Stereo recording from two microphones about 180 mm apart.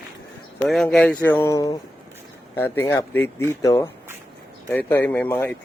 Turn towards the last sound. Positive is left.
turn(degrees=10)  # may be behind; listen again after turning